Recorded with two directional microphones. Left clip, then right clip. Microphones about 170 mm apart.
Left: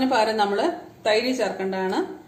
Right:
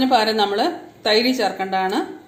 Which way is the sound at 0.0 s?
35° right (ahead or behind).